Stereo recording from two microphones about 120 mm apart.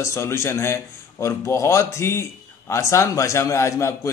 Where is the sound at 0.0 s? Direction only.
20° left (ahead or behind).